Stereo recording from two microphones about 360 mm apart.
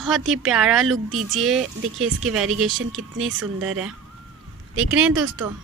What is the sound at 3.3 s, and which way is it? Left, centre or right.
Speech, right.